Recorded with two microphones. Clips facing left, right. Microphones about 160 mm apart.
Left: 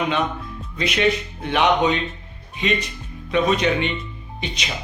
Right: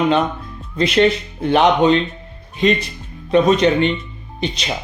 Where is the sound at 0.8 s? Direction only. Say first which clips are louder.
Right 6 dB; 30° right (ahead or behind).